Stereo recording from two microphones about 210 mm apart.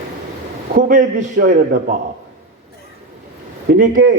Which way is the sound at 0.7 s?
35° right (ahead or behind).